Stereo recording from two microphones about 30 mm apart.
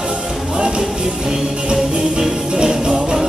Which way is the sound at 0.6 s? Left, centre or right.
Right.